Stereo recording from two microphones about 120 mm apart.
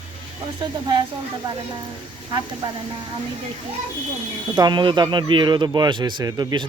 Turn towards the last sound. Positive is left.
turn(degrees=-35)  # may be behind; listen again after turning